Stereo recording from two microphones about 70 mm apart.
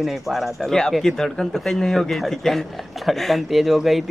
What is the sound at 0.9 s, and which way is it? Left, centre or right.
Speech, centre.